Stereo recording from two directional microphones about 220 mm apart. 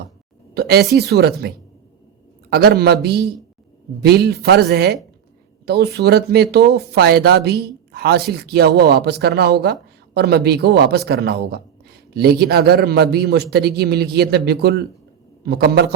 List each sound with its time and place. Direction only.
0.5 s a woman's voice: 45° right (ahead or behind)